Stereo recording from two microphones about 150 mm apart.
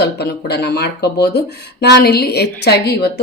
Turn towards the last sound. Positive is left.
turn(degrees=90)